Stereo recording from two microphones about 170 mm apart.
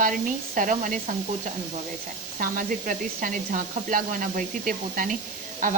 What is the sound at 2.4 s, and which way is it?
Speech, 50° right (ahead or behind).